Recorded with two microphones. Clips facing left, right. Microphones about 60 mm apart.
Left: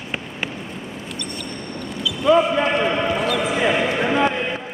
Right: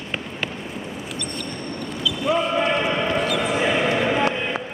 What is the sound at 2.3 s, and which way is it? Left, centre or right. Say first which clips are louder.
Basketball bounce: left 7 dB; left.